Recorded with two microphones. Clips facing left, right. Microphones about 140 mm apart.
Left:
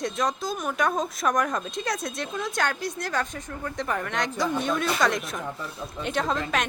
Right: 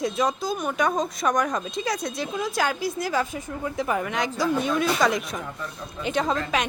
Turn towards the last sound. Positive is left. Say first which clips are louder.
# right 2 dB
turn(degrees=0)  # may be behind; listen again after turning